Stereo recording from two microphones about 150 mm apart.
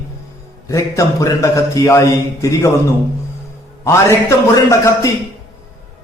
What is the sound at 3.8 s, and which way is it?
A man's voice, 20° left (ahead or behind).